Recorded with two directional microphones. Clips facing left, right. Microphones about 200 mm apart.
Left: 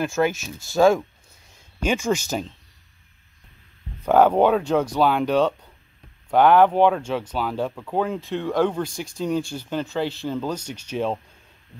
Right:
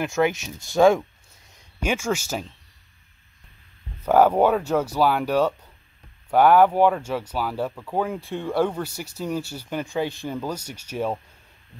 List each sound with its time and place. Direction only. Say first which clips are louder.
0.2 s speech: right 2 dB; 20° right (ahead or behind)
1.8 s speech: left 2 dB; 10° right (ahead or behind)
4.0 s speech: left 1 dB; 10° right (ahead or behind)